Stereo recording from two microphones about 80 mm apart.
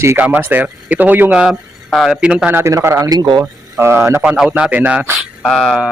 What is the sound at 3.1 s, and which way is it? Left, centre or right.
Speech, right.